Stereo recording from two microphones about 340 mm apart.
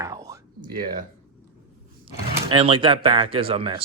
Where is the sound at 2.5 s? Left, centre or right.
Centre.